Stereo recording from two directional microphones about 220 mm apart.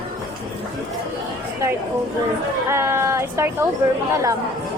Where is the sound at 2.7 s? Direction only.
10° right (ahead or behind).